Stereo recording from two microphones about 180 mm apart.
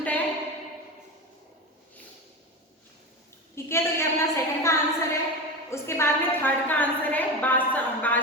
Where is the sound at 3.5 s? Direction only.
15° left (ahead or behind).